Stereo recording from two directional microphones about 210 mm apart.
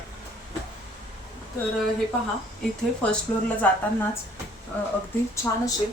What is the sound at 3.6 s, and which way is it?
Speech, 5° left (ahead or behind).